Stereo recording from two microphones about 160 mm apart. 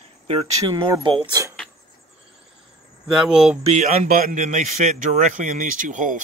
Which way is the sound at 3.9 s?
60° right (ahead or behind).